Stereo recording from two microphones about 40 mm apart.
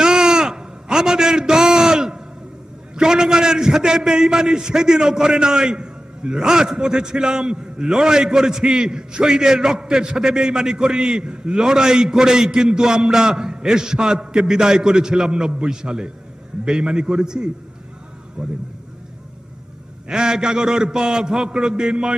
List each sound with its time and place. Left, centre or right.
0.0 s a sound: centre
2.9 s a man's voice: centre
20.1 s a man's voice: centre